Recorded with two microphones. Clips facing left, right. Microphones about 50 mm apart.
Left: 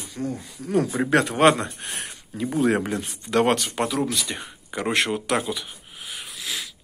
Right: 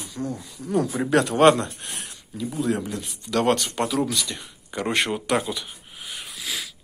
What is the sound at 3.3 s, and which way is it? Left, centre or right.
Speech, centre.